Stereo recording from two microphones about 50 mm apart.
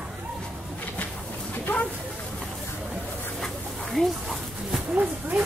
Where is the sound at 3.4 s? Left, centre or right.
Centre.